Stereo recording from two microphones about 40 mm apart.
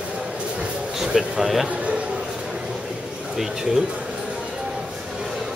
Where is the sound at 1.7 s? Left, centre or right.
Right.